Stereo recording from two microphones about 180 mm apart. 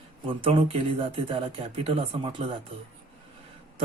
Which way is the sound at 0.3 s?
30° right (ahead or behind).